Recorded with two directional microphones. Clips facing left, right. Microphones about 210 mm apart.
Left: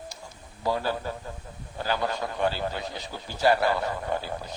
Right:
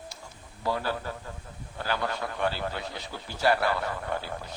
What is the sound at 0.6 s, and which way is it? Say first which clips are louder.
Speech: left 2 dB; 15° left (ahead or behind).